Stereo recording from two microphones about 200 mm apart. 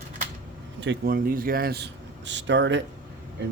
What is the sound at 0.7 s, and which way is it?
A man's voice, 55° right (ahead or behind).